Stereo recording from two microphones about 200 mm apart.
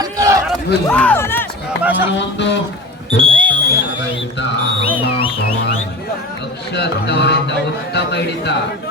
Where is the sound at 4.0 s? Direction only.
60° left (ahead or behind).